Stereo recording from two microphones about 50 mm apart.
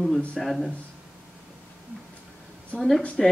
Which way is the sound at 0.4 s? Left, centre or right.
Centre.